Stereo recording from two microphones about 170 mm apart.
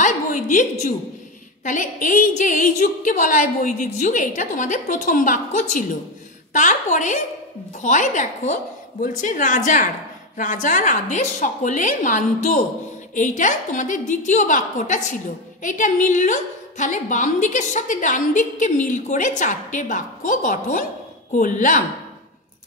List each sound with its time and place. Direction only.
0.0 s a woman's voice: 50° left (ahead or behind)